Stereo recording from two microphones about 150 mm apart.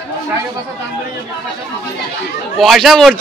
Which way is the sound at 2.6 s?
Centre (ahead or behind).